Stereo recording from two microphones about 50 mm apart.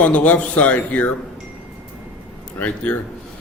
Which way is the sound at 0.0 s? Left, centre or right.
Left.